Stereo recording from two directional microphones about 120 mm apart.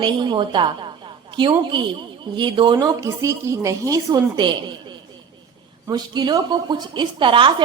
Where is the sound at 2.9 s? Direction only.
25° right (ahead or behind).